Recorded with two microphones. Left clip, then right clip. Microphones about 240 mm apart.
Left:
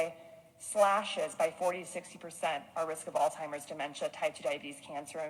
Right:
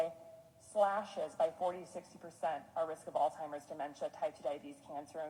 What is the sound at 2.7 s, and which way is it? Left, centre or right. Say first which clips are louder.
Speech: left 3 dB; left.